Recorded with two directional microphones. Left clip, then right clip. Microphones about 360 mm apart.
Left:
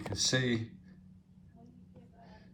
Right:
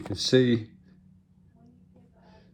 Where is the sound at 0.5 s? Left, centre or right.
Centre.